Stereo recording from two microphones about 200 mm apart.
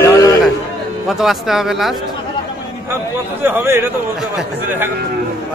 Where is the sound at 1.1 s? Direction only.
Centre (ahead or behind).